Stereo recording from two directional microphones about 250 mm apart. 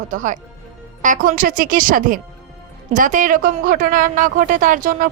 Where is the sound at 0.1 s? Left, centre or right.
Right.